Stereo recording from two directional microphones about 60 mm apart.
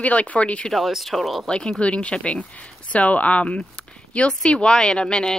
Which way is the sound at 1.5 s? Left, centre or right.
Centre.